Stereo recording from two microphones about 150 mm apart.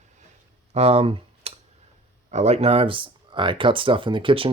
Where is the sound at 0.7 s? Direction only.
45° right (ahead or behind).